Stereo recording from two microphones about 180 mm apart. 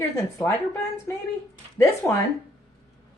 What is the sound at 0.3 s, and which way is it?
Speech, 15° left (ahead or behind).